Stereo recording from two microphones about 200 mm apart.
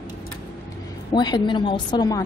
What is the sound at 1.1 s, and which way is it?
A woman's voice, 20° left (ahead or behind).